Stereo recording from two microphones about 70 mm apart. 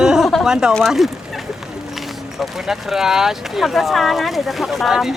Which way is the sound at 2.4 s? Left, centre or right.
Centre.